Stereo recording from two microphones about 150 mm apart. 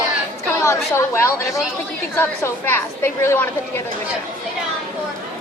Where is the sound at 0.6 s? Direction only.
15° left (ahead or behind).